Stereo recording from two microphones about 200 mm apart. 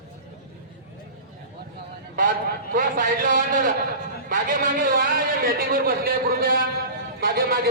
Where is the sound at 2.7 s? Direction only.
40° right (ahead or behind).